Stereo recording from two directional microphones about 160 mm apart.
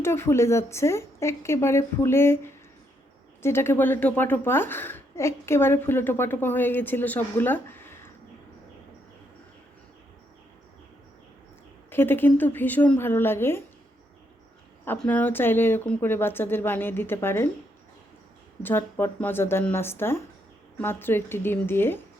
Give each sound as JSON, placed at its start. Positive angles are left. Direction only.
{"t": 0.0, "sound": "a woman's voice", "side_deg": 15}
{"t": 11.9, "sound": "a woman's voice", "side_deg": 15}
{"t": 14.8, "sound": "a woman's voice", "side_deg": 10}
{"t": 18.6, "sound": "a woman's voice", "side_deg": 15}